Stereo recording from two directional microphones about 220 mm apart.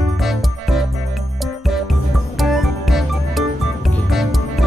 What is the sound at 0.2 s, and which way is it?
Music, centre (ahead or behind).